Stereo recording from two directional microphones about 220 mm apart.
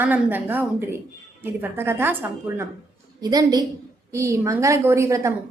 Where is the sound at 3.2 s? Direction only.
15° right (ahead or behind).